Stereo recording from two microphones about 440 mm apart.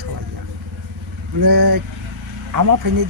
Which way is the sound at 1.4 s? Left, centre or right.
Right.